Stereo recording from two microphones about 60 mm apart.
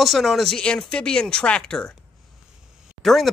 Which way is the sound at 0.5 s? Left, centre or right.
Centre.